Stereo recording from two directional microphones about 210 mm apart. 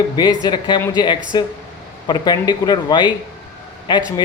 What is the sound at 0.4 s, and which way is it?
Speech, 20° left (ahead or behind).